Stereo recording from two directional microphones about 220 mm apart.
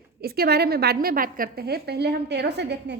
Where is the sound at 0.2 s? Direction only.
45° right (ahead or behind).